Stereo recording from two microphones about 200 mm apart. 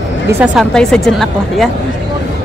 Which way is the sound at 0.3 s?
5° right (ahead or behind).